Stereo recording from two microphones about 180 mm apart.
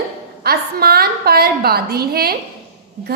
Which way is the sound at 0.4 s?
60° right (ahead or behind).